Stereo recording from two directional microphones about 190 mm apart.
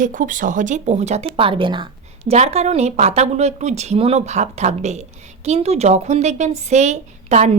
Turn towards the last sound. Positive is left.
turn(degrees=-35)  # may be behind; listen again after turning